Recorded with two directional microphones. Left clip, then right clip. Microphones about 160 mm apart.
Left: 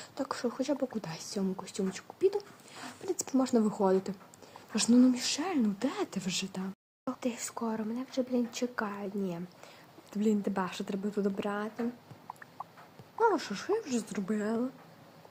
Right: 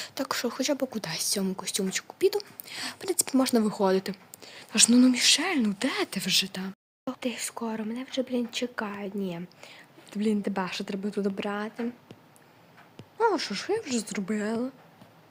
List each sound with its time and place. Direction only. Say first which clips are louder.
0.0 s speech: right 5 dB; 15° right (ahead or behind)
13.1 s speech: right 3 dB; 15° right (ahead or behind)